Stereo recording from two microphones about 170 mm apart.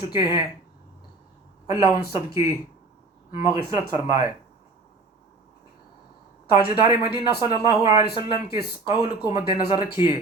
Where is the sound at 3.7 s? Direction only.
20° right (ahead or behind).